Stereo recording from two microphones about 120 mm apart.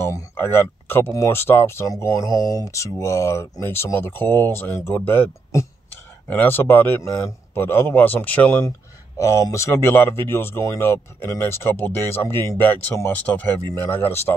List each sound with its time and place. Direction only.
0.0 s speech: 20° left (ahead or behind)